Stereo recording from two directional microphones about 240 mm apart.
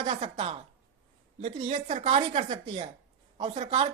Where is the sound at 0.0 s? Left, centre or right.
Right.